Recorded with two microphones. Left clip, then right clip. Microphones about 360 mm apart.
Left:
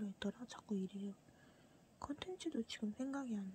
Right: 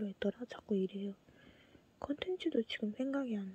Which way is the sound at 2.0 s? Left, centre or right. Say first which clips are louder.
Right 8 dB; centre.